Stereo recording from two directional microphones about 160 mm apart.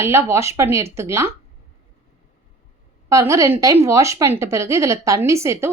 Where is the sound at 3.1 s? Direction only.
20° right (ahead or behind).